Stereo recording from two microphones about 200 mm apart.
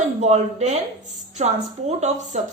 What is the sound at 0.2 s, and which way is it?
A woman's voice, 35° right (ahead or behind).